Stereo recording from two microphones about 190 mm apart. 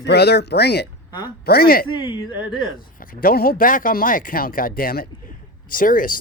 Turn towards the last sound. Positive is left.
turn(degrees=45)  # may be behind; listen again after turning